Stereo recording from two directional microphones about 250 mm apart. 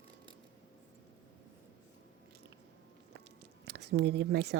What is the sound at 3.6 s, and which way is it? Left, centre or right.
Speech, right.